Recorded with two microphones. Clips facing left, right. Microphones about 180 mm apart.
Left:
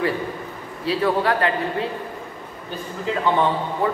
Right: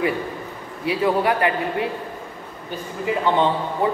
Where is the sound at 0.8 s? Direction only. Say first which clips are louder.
Right 1 dB; 20° right (ahead or behind).